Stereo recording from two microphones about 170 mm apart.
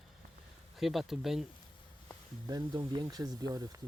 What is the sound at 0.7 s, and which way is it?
Speech, centre (ahead or behind).